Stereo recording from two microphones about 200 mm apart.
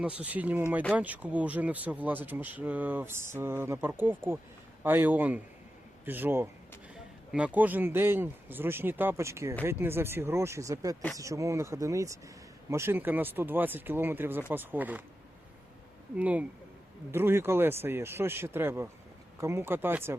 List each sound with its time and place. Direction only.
0.0 s speech: 5° right (ahead or behind)
16.1 s speech: 5° right (ahead or behind)